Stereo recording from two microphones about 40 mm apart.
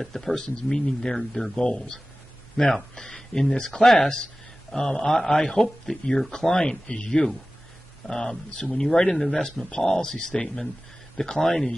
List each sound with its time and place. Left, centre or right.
0.0 s speech: centre
9.1 s speech: centre
9.4 s speech: centre